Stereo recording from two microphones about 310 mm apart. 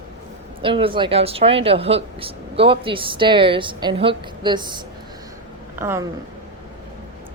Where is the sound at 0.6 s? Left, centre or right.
Centre.